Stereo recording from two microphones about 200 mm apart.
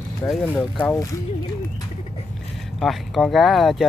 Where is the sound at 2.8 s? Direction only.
Centre (ahead or behind).